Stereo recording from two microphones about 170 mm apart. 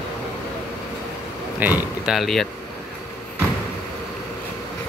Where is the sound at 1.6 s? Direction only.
5° right (ahead or behind).